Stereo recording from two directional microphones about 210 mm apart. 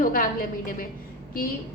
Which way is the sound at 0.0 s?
40° left (ahead or behind).